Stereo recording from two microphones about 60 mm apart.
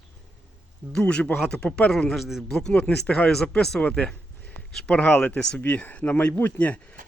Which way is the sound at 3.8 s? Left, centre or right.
Left.